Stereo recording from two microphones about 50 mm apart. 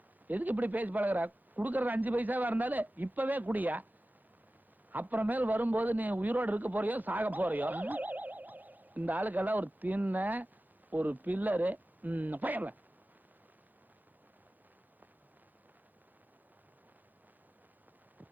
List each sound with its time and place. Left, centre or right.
0.3 s a man's voice: right
4.9 s a man's voice: right